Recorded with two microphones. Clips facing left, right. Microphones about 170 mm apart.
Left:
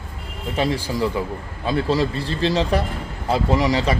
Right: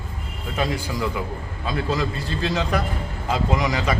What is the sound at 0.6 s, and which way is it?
A man's voice, 30° left (ahead or behind).